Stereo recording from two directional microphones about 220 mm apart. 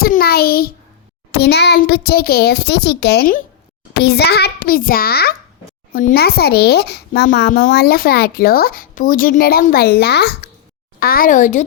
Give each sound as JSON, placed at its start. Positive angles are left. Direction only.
{"t": 0.0, "sound": "a child's voice", "side_deg": 45}